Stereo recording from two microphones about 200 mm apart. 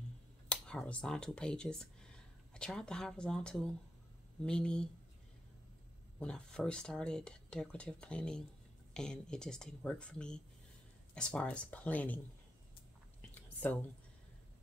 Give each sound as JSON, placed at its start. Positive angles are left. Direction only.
{"t": 0.5, "sound": "speech", "side_deg": 5}
{"t": 6.1, "sound": "speech", "side_deg": 5}
{"t": 13.3, "sound": "a sound", "side_deg": 10}